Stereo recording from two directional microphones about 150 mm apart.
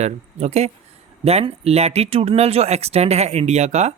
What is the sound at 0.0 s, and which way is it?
Speech, 45° right (ahead or behind).